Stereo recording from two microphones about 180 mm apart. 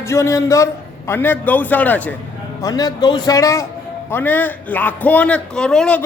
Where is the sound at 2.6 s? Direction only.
20° left (ahead or behind); by 6.0 s 5° left (ahead or behind).